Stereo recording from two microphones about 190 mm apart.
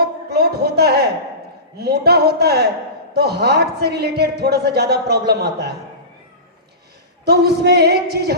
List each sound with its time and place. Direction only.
0.0 s a sound: 55° right (ahead or behind)
1.8 s speech: 55° right (ahead or behind)
7.3 s speech: 60° right (ahead or behind)